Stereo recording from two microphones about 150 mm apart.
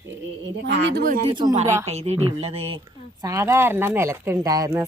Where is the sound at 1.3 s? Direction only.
30° right (ahead or behind).